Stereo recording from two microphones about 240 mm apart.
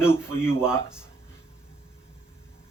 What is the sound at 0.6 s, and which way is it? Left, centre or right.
Speech, centre.